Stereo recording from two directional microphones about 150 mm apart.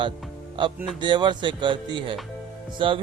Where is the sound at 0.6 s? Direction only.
30° right (ahead or behind).